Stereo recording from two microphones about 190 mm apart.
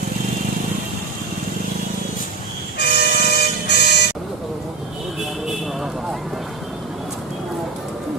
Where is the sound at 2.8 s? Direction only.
55° left (ahead or behind).